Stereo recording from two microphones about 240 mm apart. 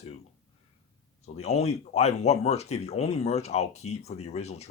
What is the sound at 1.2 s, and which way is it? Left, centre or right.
Speech, left.